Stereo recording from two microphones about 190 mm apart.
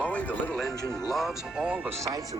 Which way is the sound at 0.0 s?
5° left (ahead or behind).